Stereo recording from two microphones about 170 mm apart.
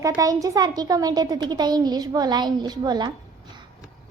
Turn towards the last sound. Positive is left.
turn(degrees=-25)  # may be behind; listen again after turning